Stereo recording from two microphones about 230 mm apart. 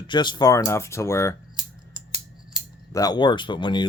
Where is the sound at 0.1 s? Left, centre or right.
Centre.